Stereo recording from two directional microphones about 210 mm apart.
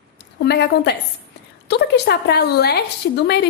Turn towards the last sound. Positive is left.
turn(degrees=50)  # may be behind; listen again after turning